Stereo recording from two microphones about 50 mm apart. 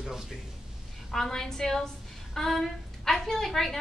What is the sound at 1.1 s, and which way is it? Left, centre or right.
A woman's voice, centre.